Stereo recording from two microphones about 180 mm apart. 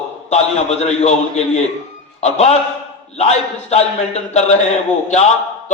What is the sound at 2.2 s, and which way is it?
A man's voice, 35° left (ahead or behind).